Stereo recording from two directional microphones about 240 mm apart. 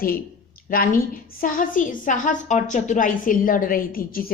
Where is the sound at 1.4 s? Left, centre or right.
Left.